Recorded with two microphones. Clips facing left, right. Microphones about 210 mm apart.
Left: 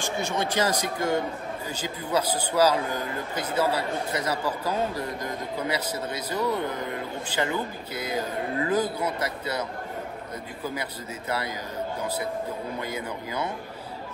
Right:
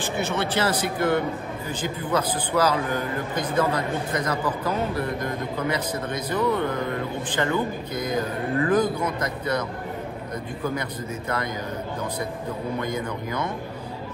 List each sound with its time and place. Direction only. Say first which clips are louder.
0.0 s a man's voice: right 2 dB; 15° left (ahead or behind)
12.8 s a man's voice: right 4 dB; 10° left (ahead or behind)